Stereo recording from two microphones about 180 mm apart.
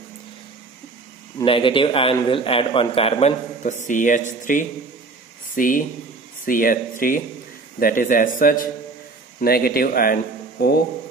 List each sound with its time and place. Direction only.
1.4 s a man's voice: 30° left (ahead or behind); by 8.3 s 50° left (ahead or behind)
9.4 s speech: 55° left (ahead or behind)